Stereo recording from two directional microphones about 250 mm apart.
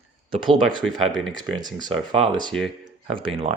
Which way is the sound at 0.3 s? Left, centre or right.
Centre.